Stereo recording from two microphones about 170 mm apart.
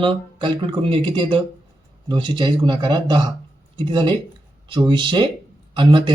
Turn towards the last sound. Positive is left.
turn(degrees=-25)  # may be behind; listen again after turning